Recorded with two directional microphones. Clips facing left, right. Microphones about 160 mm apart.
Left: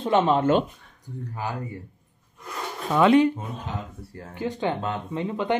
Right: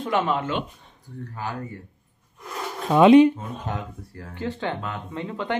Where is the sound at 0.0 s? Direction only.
25° left (ahead or behind).